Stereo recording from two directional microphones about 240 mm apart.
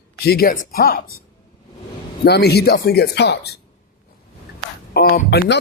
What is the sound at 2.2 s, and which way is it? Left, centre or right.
Speech, left.